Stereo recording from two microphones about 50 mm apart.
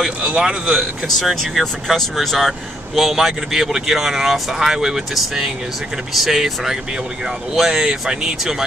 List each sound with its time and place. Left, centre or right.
0.2 s a man's voice: right
1.0 s speech: centre